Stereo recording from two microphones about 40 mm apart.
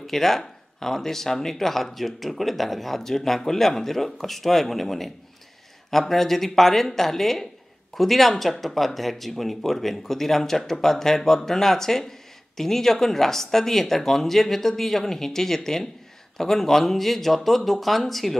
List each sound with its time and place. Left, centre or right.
0.0 s speech: centre